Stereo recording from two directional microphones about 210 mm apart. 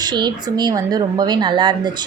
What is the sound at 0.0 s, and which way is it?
A woman's voice, 20° right (ahead or behind).